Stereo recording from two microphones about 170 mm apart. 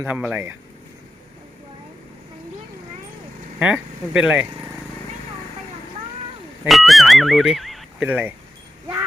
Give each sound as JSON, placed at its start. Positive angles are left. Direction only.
{"t": 0.0, "sound": "speech", "side_deg": -10}
{"t": 3.6, "sound": "speech", "side_deg": -5}
{"t": 6.7, "sound": "speech", "side_deg": 0}